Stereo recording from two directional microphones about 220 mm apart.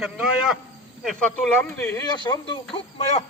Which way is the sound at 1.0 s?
10° left (ahead or behind).